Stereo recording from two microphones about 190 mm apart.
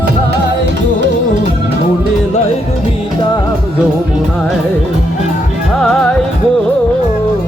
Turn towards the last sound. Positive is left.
turn(degrees=5)  # may be behind; listen again after turning